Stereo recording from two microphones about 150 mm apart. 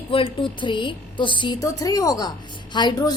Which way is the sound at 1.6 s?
25° left (ahead or behind).